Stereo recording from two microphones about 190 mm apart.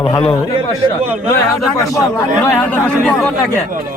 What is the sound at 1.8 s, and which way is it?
Speech, 15° left (ahead or behind).